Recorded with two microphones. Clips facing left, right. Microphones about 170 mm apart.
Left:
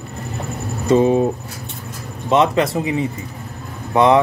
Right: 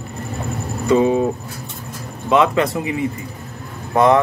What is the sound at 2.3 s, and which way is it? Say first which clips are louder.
Speech: even; 30° left (ahead or behind).